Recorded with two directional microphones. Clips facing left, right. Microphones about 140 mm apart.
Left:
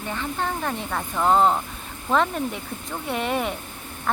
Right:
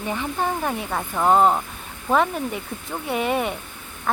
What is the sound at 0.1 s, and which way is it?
Speech, 15° right (ahead or behind).